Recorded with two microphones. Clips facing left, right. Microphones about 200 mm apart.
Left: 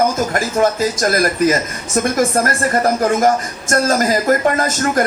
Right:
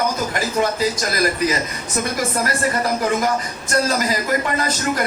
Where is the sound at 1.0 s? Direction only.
50° left (ahead or behind).